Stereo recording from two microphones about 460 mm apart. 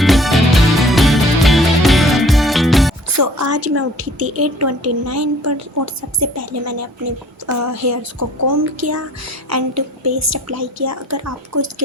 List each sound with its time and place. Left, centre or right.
0.0 s music: centre
3.2 s a woman's voice: right